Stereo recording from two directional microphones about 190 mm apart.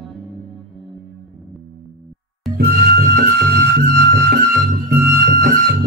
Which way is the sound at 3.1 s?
60° right (ahead or behind).